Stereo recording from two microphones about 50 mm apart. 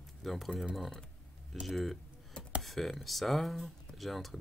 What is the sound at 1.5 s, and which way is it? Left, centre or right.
Speech, centre.